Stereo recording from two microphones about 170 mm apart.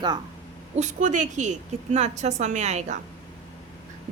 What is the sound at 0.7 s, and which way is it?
A woman's voice, 45° right (ahead or behind).